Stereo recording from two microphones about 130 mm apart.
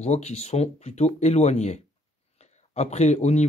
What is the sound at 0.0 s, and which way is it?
Speech, 55° left (ahead or behind).